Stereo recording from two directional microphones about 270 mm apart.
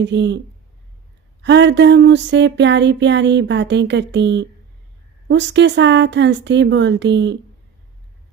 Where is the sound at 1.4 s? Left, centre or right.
Right.